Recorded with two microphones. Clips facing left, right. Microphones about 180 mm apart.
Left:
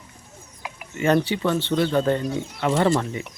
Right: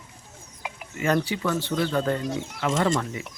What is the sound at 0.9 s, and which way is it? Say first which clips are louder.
Speech: left 4 dB; 25° left (ahead or behind).